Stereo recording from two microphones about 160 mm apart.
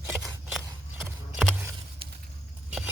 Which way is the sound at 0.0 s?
15° right (ahead or behind).